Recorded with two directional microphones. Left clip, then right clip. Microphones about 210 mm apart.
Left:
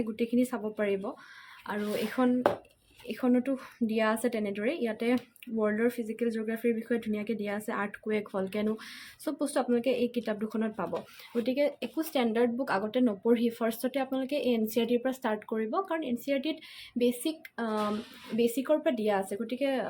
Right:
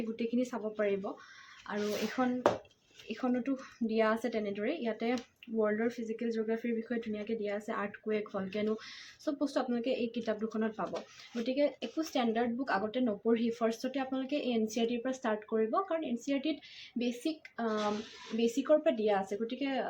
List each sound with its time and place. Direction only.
0.2 s a woman's voice: 45° left (ahead or behind)